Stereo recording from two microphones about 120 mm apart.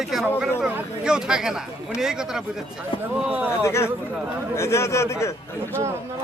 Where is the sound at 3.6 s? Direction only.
25° left (ahead or behind).